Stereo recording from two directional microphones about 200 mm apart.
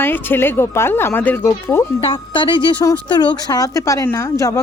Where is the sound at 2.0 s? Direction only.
25° left (ahead or behind).